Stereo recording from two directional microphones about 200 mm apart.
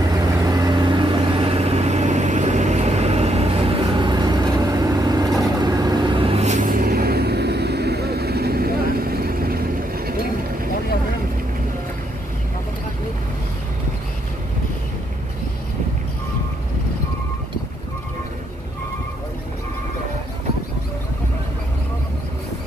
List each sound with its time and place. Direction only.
0.2 s vehicle: 20° right (ahead or behind); by 10.1 s 50° right (ahead or behind)